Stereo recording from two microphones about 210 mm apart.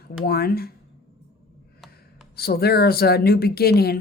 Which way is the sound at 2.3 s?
45° left (ahead or behind).